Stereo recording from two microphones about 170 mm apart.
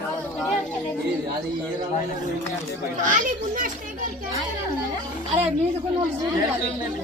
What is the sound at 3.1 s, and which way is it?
Speech, 50° right (ahead or behind).